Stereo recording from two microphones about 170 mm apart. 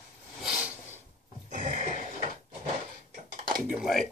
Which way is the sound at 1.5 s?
50° right (ahead or behind).